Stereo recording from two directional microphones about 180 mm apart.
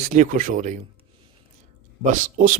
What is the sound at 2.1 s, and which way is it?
Speech, 45° right (ahead or behind).